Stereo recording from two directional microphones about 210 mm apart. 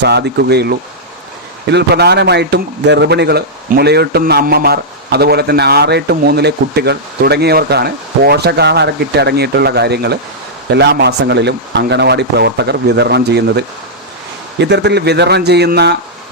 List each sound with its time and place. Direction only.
0.0 s speech: 55° right (ahead or behind)